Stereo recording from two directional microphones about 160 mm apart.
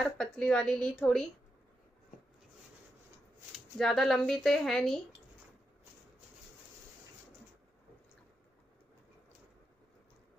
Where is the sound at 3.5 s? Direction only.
Centre (ahead or behind).